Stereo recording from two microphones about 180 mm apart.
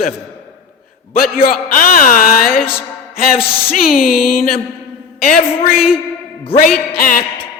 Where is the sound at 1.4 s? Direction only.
50° left (ahead or behind).